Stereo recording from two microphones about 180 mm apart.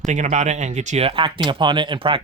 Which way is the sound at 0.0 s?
40° right (ahead or behind).